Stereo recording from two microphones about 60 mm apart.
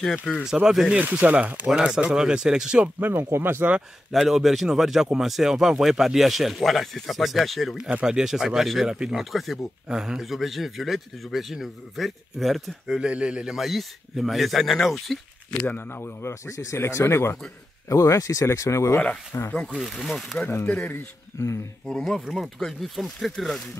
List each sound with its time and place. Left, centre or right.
0.3 s speech: centre
0.7 s speech: centre
0.9 s speech: right
2.0 s speech: centre
3.0 s speech: right
4.1 s speech: centre
12.8 s speech: centre
15.6 s speech: left
17.8 s speech: left
20.0 s speech: centre
20.4 s speech: left
21.8 s speech: centre
22.2 s speech: centre
22.7 s speech: centre